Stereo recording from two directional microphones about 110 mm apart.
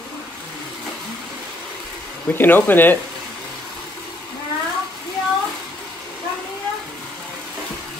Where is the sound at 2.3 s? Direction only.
20° left (ahead or behind).